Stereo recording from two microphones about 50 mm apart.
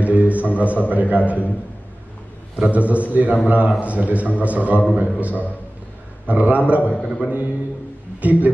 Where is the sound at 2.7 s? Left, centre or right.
Right.